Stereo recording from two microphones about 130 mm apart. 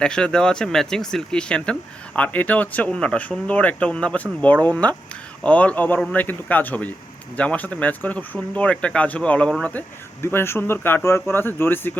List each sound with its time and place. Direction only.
0.0 s speech: 5° left (ahead or behind)
9.7 s speech: 20° left (ahead or behind)